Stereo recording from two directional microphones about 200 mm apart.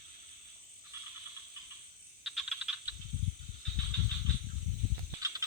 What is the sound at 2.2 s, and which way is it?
Frog, 5° right (ahead or behind).